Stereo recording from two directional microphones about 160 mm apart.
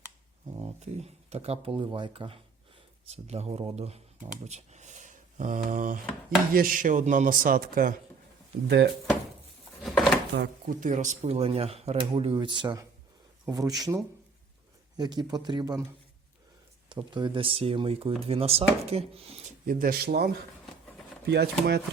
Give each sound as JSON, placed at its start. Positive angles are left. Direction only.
{"t": 0.8, "sound": "speech", "side_deg": -40}
{"t": 8.6, "sound": "speech", "side_deg": -90}
{"t": 9.8, "sound": "a sound", "side_deg": 0}
{"t": 10.3, "sound": "speech", "side_deg": -90}
{"t": 10.8, "sound": "speech", "side_deg": -50}
{"t": 17.2, "sound": "speech", "side_deg": -30}
{"t": 19.6, "sound": "speech", "side_deg": -65}
{"t": 21.2, "sound": "speech", "side_deg": -90}